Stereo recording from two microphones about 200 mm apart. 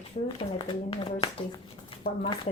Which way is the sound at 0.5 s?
30° left (ahead or behind).